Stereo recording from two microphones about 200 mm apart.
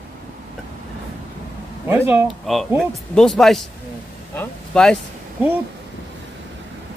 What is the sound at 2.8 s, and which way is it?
Speech, centre (ahead or behind).